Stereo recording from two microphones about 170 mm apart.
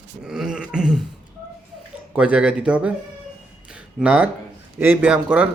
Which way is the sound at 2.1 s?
5° right (ahead or behind).